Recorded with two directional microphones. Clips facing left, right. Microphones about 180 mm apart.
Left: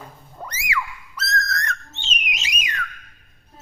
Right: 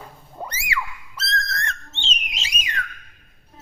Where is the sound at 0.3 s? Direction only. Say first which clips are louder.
Left 1 dB; 30° right (ahead or behind).